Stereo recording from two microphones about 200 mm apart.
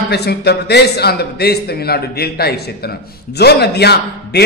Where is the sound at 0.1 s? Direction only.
55° left (ahead or behind).